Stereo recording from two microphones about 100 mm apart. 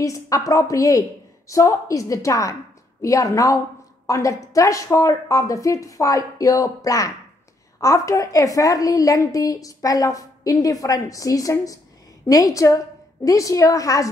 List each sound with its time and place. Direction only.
0.0 s a woman's voice: 35° left (ahead or behind)